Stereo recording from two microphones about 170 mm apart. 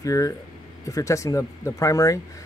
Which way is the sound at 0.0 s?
20° left (ahead or behind).